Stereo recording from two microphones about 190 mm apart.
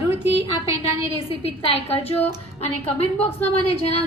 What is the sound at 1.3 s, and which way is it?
A woman's voice, 30° left (ahead or behind).